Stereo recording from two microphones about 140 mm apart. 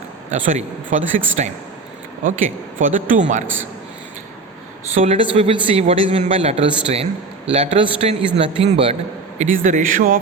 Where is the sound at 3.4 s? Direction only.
15° right (ahead or behind).